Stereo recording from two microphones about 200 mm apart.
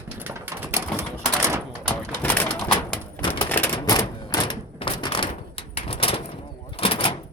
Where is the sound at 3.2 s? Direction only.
10° left (ahead or behind).